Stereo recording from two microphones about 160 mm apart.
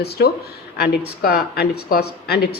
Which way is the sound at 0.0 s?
80° left.